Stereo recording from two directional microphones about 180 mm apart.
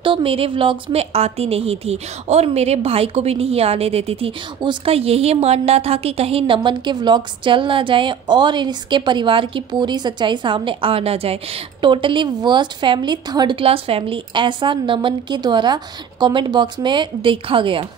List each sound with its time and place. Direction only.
0.0 s a woman's voice: 30° right (ahead or behind)